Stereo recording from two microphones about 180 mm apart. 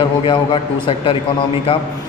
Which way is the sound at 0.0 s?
25° left (ahead or behind).